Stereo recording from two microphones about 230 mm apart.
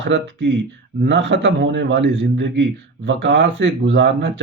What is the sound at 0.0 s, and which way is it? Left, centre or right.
A man's voice, right.